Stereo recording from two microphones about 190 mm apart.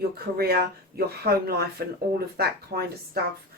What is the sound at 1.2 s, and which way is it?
Speech, 55° right (ahead or behind).